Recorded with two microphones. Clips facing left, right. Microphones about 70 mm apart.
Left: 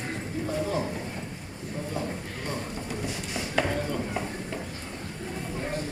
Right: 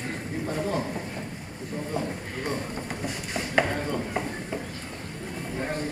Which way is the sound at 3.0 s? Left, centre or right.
Right.